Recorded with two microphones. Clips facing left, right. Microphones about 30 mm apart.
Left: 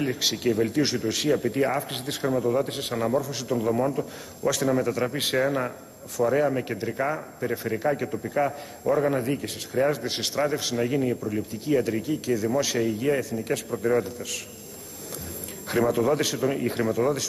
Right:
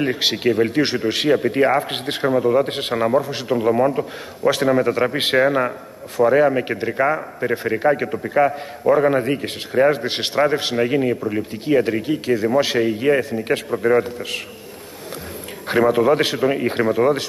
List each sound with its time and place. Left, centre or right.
0.0 s a man's voice: right
15.7 s a man's voice: right